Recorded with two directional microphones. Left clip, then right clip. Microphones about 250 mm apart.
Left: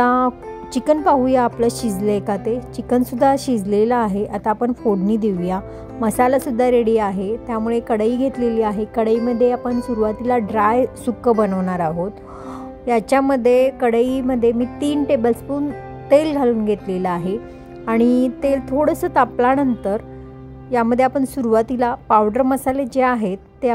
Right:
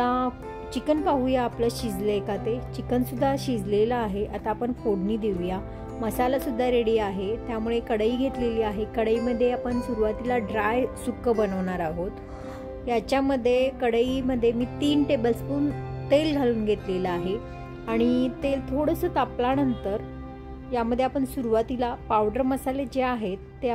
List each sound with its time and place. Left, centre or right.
0.0 s music: left
0.7 s a woman's voice: left